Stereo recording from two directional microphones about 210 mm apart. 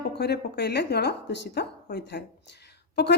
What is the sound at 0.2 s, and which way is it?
A woman's voice, 50° left (ahead or behind).